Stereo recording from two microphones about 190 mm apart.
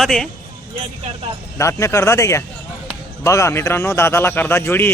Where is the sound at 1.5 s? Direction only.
15° left (ahead or behind).